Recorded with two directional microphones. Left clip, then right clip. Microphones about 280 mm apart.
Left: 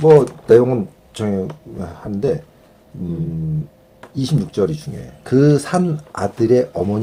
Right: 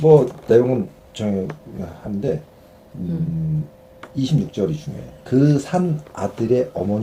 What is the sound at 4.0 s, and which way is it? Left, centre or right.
Speech, left.